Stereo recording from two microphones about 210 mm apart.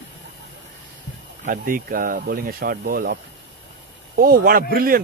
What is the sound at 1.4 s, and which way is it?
Speech, 40° right (ahead or behind).